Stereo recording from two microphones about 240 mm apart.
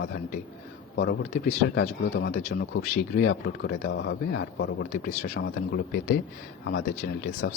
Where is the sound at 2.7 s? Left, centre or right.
Left.